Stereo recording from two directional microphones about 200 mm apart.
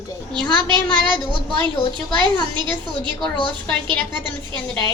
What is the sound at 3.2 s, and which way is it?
Speech, 25° left (ahead or behind).